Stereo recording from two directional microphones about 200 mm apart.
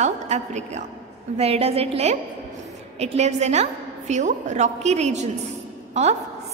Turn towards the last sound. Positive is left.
turn(degrees=-35)  # may be behind; listen again after turning